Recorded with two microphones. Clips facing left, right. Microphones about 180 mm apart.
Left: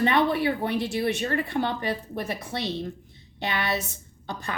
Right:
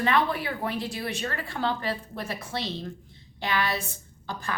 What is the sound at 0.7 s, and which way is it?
Speech, 70° left (ahead or behind).